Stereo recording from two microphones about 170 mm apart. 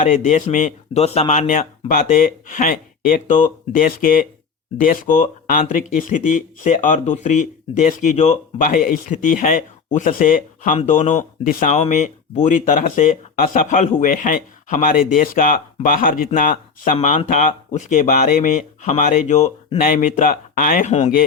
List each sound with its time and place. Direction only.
0.0 s speech: 50° left (ahead or behind)
19.8 s speech: 55° left (ahead or behind)